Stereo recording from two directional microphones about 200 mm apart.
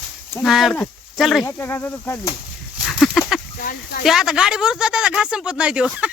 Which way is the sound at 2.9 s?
Centre (ahead or behind).